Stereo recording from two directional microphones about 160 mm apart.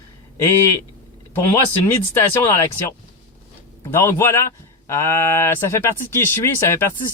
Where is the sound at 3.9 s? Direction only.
15° left (ahead or behind).